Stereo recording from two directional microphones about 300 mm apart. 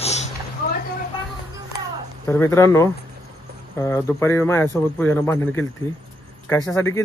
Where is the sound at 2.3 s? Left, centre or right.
Centre.